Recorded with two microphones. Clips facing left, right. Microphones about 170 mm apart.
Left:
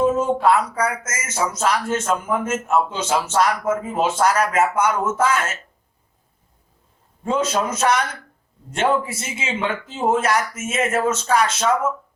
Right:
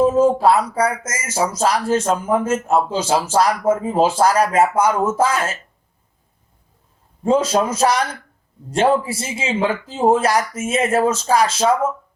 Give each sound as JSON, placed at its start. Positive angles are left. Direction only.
{"t": 0.0, "sound": "speech", "side_deg": -35}
{"t": 7.3, "sound": "speech", "side_deg": -35}